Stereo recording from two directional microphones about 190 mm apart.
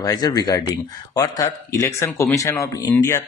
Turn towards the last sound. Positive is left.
turn(degrees=15)  # may be behind; listen again after turning